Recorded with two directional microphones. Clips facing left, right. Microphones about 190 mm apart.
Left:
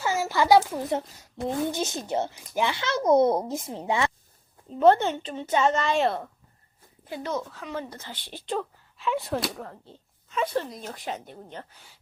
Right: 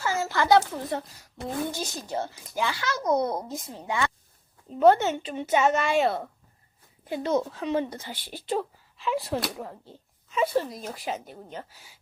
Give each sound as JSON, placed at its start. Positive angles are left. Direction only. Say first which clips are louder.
{"t": 0.0, "sound": "a woman's voice", "louder": "left 2 dB", "side_deg": 15}
{"t": 4.7, "sound": "a woman's voice", "louder": "even", "side_deg": -5}
{"t": 5.1, "sound": "speech", "louder": "right 1 dB", "side_deg": -15}
{"t": 7.1, "sound": "speech", "louder": "right 5 dB", "side_deg": -20}